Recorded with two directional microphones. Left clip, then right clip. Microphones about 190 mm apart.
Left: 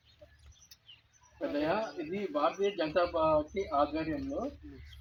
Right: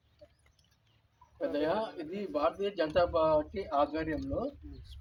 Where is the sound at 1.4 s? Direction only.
20° right (ahead or behind).